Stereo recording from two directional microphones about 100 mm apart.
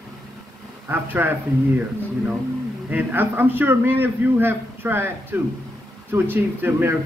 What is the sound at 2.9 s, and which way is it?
A man's voice, 20° right (ahead or behind).